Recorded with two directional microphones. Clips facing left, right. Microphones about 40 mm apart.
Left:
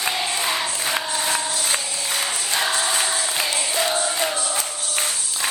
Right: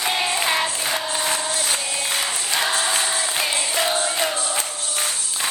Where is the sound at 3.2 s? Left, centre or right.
Right.